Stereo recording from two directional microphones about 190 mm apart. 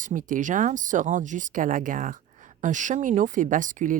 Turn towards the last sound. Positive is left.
turn(degrees=-45)  # may be behind; listen again after turning